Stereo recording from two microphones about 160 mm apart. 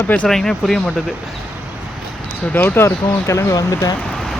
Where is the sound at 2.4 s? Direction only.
10° left (ahead or behind).